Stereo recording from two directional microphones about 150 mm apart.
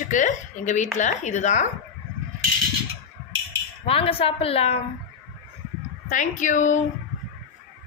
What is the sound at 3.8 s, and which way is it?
Speech, 40° left (ahead or behind).